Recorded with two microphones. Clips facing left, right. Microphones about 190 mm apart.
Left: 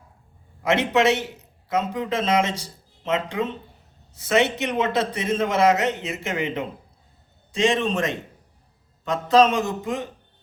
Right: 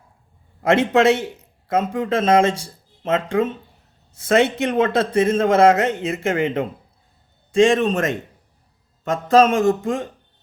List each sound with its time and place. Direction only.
0.6 s a man's voice: 50° right (ahead or behind)